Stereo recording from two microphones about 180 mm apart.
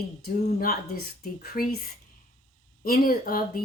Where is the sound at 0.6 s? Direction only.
55° left (ahead or behind).